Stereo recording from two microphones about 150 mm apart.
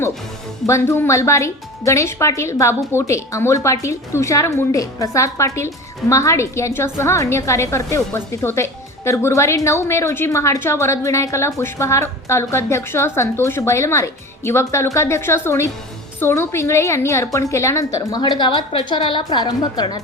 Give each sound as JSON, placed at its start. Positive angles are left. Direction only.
{"t": 0.7, "sound": "a woman's voice", "side_deg": 15}